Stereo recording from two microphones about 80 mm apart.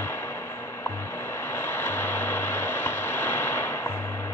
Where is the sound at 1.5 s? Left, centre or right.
Left.